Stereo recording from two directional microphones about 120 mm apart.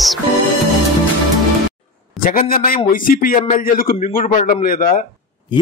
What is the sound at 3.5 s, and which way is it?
A man's voice, 90° left.